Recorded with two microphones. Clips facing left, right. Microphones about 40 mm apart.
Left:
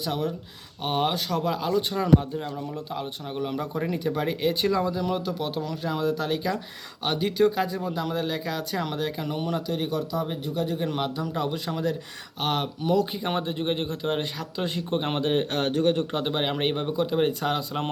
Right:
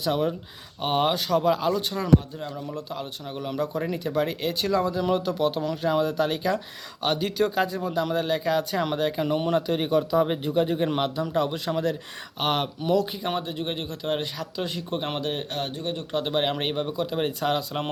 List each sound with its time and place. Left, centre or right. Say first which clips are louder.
0.8 s speech: right 2 dB; centre
2.1 s speech: right 1 dB; centre
3.0 s speech: left 2 dB; centre; by 10.2 s right
10.2 s speech: right 4 dB; right
10.5 s a man's voice: right 4 dB; right
11.0 s speech: right 3 dB; centre
12.8 s speech: left 1 dB; centre
15.4 s speech: left 7 dB; left
16.2 s speech: right 3 dB; centre